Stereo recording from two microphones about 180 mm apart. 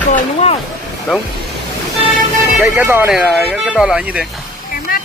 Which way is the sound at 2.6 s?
15° right (ahead or behind).